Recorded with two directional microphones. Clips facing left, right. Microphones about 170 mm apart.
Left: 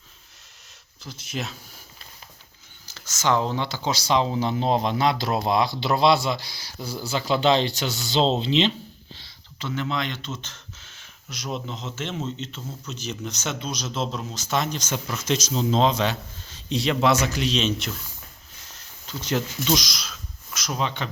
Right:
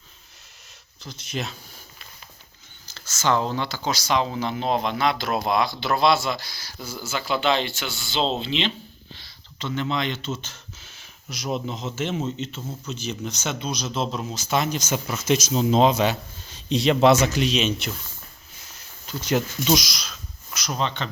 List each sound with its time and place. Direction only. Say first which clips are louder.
1.0 s speech: right 1 dB; 5° left (ahead or behind)
2.8 s a sound: even; 15° left (ahead or behind)
3.5 s speech: even; 20° left (ahead or behind); by 8.4 s 40° left (ahead or behind)
9.6 s speech: right 1 dB; 5° left (ahead or behind); by 17.5 s 20° right (ahead or behind)
17.5 s speech: right 1 dB; 5° right (ahead or behind)
19.0 s speech: right 3 dB; 10° right (ahead or behind)
19.9 s speech: even; centre (ahead or behind)